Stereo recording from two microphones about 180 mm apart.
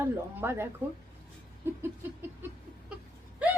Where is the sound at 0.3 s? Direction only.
15° right (ahead or behind).